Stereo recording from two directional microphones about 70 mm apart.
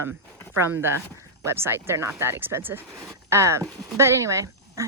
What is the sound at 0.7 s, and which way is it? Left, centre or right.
Speech, right.